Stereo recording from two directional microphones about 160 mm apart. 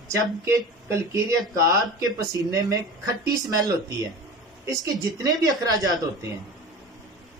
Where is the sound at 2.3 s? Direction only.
25° right (ahead or behind).